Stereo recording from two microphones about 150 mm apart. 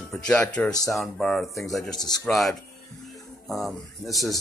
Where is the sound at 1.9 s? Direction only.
25° left (ahead or behind).